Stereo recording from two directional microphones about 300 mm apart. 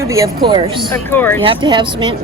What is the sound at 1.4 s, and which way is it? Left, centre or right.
Speech, centre.